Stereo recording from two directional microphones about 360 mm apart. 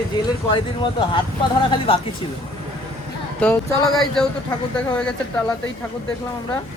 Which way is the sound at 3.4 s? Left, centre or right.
Centre.